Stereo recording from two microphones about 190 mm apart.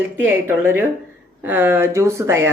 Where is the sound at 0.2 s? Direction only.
10° right (ahead or behind).